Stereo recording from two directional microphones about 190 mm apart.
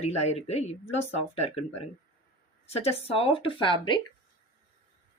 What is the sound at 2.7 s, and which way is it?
Speech, 35° left (ahead or behind).